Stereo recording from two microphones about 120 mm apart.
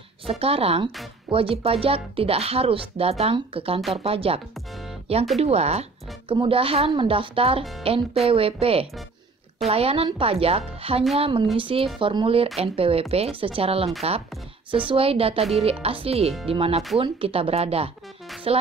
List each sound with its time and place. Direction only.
0.3 s speech: 55° right (ahead or behind)
6.3 s speech: 50° right (ahead or behind)